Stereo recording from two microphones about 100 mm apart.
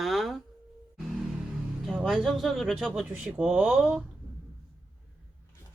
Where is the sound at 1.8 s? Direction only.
Centre (ahead or behind).